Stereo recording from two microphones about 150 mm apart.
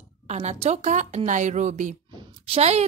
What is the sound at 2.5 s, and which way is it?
Speech, 45° right (ahead or behind).